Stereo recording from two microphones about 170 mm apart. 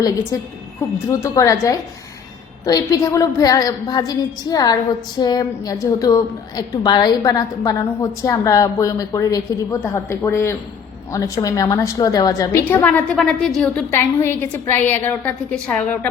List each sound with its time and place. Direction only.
1.0 s a woman's voice: 15° left (ahead or behind)